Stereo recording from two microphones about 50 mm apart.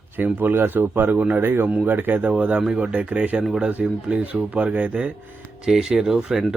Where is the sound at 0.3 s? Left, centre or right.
Right.